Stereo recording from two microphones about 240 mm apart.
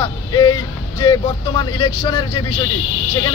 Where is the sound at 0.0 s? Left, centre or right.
Centre.